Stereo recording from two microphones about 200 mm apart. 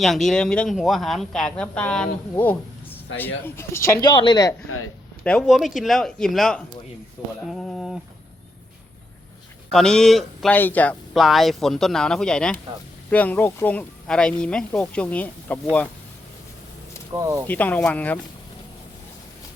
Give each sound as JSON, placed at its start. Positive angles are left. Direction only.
{"t": 0.0, "sound": "speech", "side_deg": 0}
{"t": 2.4, "sound": "a sound", "side_deg": 10}
{"t": 3.2, "sound": "speech", "side_deg": 10}
{"t": 5.2, "sound": "speech", "side_deg": 5}
{"t": 9.7, "sound": "speech", "side_deg": 5}
{"t": 17.2, "sound": "speech", "side_deg": -15}
{"t": 17.4, "sound": "speech", "side_deg": 10}